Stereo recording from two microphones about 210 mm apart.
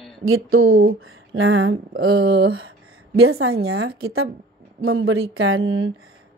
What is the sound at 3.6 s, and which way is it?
A woman's voice, 80° right.